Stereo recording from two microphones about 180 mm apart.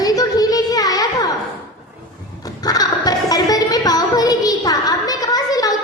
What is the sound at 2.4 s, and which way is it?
Music, 20° left (ahead or behind).